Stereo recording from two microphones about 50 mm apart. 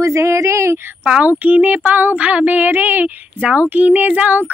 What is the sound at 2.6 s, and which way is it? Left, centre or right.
A woman's voice, right.